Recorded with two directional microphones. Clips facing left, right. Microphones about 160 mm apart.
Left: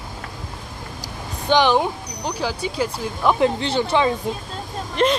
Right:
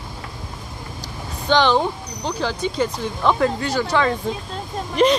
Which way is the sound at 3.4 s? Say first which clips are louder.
Left 1 dB; 25° left (ahead or behind).